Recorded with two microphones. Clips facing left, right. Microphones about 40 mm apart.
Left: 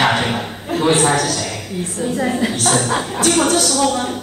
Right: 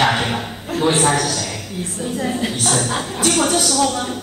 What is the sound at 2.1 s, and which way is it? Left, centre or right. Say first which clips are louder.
Speech: left 3 dB; left.